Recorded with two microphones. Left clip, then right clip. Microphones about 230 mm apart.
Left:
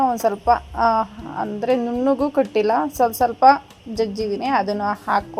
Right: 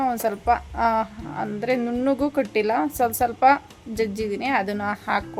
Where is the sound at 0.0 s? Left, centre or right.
Centre.